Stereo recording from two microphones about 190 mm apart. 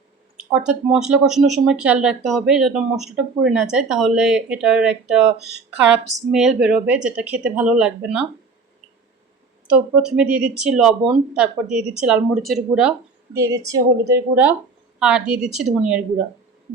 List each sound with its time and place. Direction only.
0.3 s speech: 5° right (ahead or behind)
9.6 s speech: 5° right (ahead or behind)
13.3 s a woman's voice: 15° right (ahead or behind)